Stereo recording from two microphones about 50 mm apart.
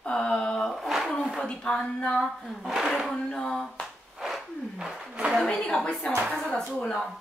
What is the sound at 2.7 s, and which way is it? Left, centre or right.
Speech, centre.